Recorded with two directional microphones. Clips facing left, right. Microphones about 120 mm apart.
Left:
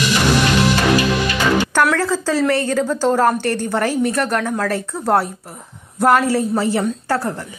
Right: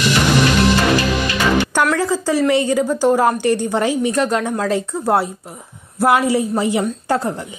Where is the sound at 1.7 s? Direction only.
15° right (ahead or behind).